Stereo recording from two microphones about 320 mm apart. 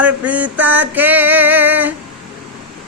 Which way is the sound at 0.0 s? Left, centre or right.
Centre.